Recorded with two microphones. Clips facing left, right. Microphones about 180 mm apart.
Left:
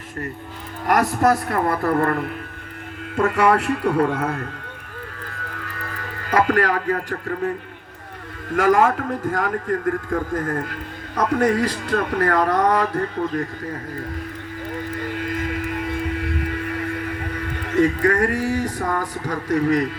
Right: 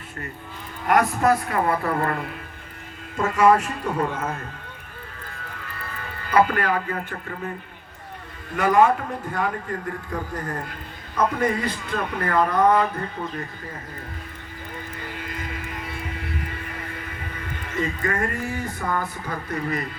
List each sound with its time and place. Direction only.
0.9 s speech: 40° left (ahead or behind)
3.2 s speech: 65° left (ahead or behind)
5.6 s speech: 80° left
8.5 s speech: 90° left
9.6 s speech: 50° left (ahead or behind)
10.7 s speech: 75° left (ahead or behind)
15.2 s music: 70° left (ahead or behind)
16.1 s a sound: 70° left (ahead or behind); by 19.9 s 90° left